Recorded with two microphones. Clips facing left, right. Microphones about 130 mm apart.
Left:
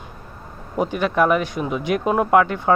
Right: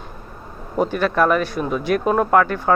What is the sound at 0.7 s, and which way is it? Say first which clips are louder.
Speech: right 1 dB; 15° left (ahead or behind).